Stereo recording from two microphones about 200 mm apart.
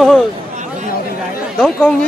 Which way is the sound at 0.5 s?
40° right (ahead or behind).